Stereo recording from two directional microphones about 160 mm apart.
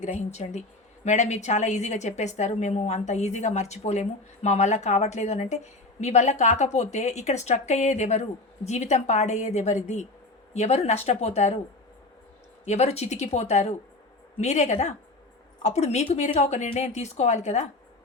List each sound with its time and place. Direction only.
0.0 s a woman's voice: 45° left (ahead or behind)
12.6 s a woman's voice: 45° left (ahead or behind)